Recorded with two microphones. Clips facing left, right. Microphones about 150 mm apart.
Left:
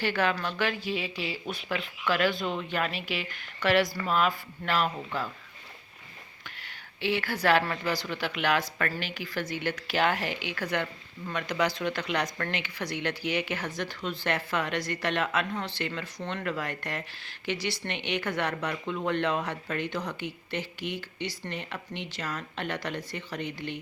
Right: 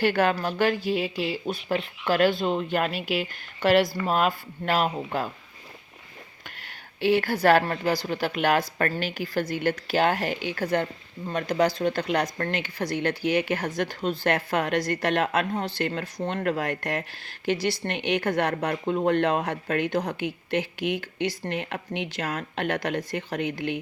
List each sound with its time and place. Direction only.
0.0 s speech: 50° right (ahead or behind)
6.4 s a sound: 45° right (ahead or behind)
7.7 s speech: 40° right (ahead or behind)